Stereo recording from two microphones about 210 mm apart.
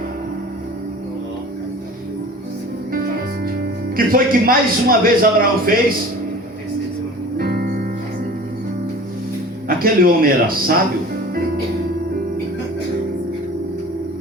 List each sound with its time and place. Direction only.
3.4 s speech: 45° right (ahead or behind)
7.3 s music: 45° right (ahead or behind)
9.6 s a man's voice: 45° right (ahead or behind)